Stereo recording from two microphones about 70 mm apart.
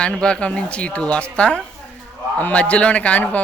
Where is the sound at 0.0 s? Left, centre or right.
Centre.